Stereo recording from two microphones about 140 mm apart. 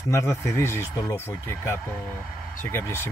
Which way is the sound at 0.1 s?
20° left (ahead or behind).